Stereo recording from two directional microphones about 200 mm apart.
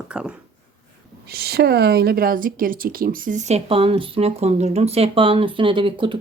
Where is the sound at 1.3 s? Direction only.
50° right (ahead or behind).